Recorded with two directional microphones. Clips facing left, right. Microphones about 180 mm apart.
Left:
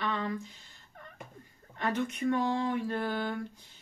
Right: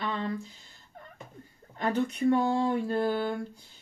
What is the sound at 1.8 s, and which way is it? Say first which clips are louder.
Speech: right 4 dB; 35° right (ahead or behind).